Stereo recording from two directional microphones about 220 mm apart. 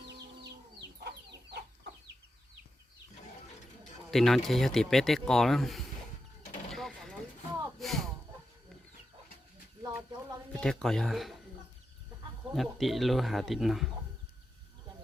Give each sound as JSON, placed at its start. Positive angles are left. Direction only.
{"t": 0.9, "sound": "chicken", "side_deg": -45}
{"t": 4.1, "sound": "speech", "side_deg": 0}
{"t": 6.7, "sound": "a sound", "side_deg": 0}
{"t": 9.8, "sound": "a sound", "side_deg": -15}
{"t": 10.5, "sound": "speech", "side_deg": 5}
{"t": 12.5, "sound": "speech", "side_deg": 0}